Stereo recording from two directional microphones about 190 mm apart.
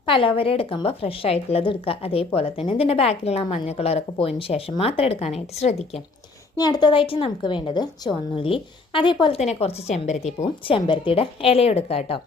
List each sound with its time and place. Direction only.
0.1 s a woman's voice: 30° left (ahead or behind)
6.6 s a woman's voice: 20° left (ahead or behind)